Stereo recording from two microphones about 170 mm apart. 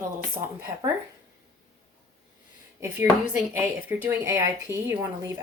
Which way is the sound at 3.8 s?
10° right (ahead or behind).